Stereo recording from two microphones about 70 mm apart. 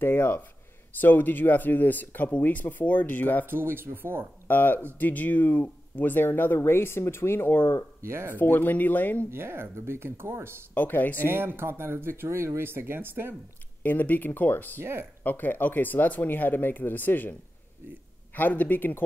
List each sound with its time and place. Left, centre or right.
0.0 s speech: left
3.4 s speech: right
4.5 s speech: left
8.0 s speech: right
8.4 s speech: left
9.3 s speech: right
10.7 s speech: left
11.1 s speech: right
13.8 s speech: left
14.8 s speech: right
15.2 s speech: left